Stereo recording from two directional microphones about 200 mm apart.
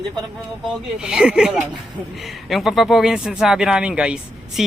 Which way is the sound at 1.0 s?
5° right (ahead or behind).